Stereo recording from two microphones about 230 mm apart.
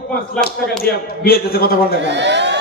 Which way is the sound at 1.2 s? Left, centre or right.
Left.